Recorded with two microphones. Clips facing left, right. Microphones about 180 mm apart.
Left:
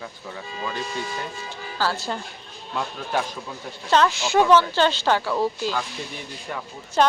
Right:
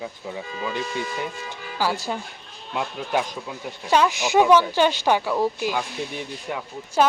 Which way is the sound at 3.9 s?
15° right (ahead or behind).